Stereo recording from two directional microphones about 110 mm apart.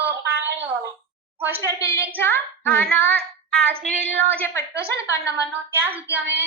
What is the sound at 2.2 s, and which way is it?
Speech, 20° left (ahead or behind).